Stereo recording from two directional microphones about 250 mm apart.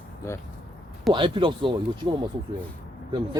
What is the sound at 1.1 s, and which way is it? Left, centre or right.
Speech, centre.